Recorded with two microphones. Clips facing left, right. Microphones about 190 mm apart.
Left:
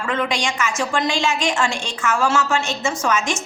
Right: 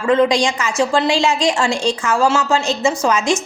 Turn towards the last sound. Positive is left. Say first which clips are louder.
# right 5 dB
turn(degrees=-35)  # may be behind; listen again after turning